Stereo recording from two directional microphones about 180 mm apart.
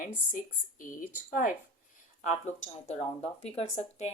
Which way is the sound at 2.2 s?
40° left (ahead or behind).